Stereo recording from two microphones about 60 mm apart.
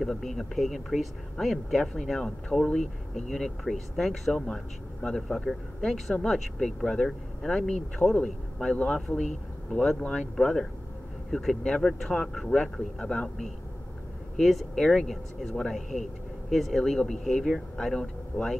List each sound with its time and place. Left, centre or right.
0.0 s speech: centre
9.9 s speech: centre
10.3 s speech: centre
14.3 s speech: centre